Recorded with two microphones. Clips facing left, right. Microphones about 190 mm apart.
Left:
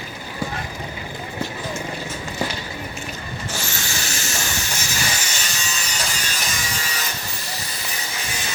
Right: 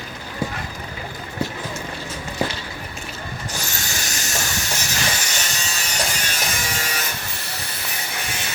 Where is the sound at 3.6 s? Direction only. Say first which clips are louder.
Left 1 dB; 40° right (ahead or behind).